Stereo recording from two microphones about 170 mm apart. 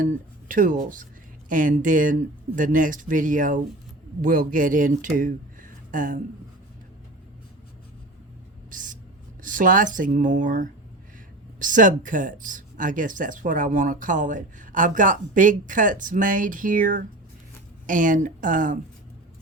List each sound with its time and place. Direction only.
0.0 s speech: 50° right (ahead or behind)
8.7 s a sound: 50° right (ahead or behind)
9.4 s speech: 50° right (ahead or behind)